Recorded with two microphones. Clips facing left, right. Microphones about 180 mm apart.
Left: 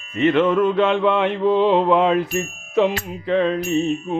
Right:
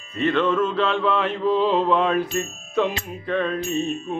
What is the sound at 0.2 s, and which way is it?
Mantra, 20° left (ahead or behind).